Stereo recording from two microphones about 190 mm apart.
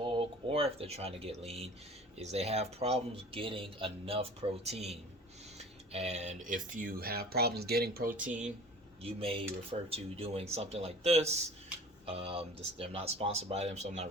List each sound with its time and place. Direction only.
0.0 s speech: 30° right (ahead or behind); by 8.1 s 55° right (ahead or behind)
9.0 s speech: 30° right (ahead or behind)